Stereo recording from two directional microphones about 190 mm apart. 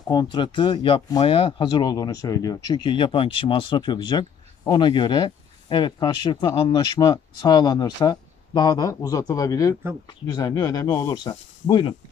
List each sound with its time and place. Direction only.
0.1 s speech: 20° left (ahead or behind)